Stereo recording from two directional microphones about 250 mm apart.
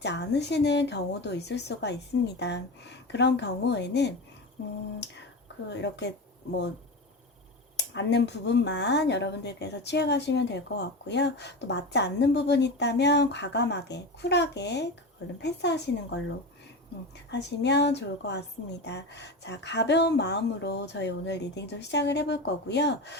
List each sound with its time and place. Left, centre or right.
0.0 s speech: left
5.6 s speech: left
7.8 s speech: left
17.3 s speech: left